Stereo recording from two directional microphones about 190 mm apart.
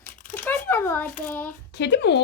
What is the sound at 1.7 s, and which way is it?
Speech, 65° left (ahead or behind).